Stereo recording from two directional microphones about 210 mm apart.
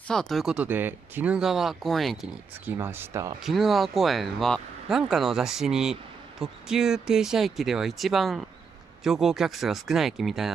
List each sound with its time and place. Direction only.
0.1 s speech: centre (ahead or behind)
3.4 s speech: centre (ahead or behind)